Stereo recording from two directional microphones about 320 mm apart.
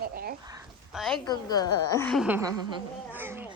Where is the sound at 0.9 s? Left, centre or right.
Centre.